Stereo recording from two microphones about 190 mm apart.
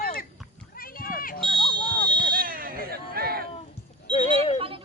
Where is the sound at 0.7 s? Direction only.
50° left (ahead or behind).